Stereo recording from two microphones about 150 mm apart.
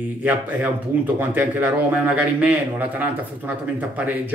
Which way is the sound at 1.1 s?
10° right (ahead or behind).